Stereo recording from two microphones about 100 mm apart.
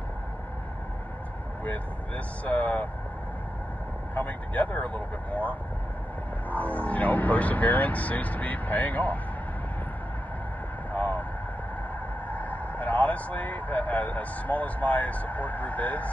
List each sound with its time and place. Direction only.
1.6 s speech: 15° left (ahead or behind)
4.1 s speech: 15° left (ahead or behind)
10.9 s vehicle: 15° left (ahead or behind)
12.3 s speech: 15° left (ahead or behind)